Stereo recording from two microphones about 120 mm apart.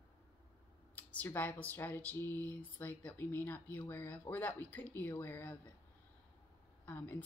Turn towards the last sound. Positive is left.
turn(degrees=15)  # may be behind; listen again after turning